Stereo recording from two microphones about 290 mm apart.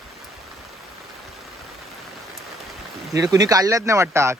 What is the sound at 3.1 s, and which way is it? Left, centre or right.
Speech, centre.